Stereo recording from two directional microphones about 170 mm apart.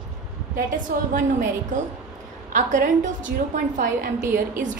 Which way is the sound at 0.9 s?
60° right (ahead or behind).